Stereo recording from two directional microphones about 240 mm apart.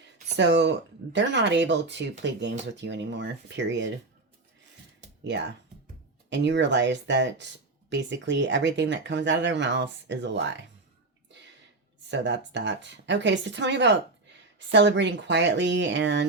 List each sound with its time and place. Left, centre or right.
0.3 s speech: right
6.3 s speech: right
12.0 s speech: right